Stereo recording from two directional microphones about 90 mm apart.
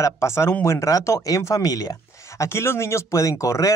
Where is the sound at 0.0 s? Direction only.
30° left (ahead or behind).